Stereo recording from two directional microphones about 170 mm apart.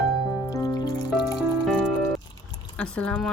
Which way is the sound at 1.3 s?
Centre (ahead or behind).